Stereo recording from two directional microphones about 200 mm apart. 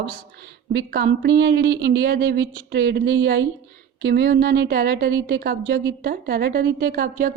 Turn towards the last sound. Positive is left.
turn(degrees=-45)  # may be behind; listen again after turning